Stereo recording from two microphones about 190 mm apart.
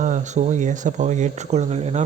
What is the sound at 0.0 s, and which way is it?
Speech, 40° right (ahead or behind).